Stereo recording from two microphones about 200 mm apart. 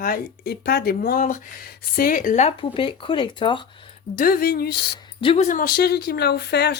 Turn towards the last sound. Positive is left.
turn(degrees=60)  # may be behind; listen again after turning